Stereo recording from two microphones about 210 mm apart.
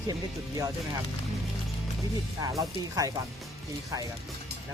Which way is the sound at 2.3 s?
15° right (ahead or behind).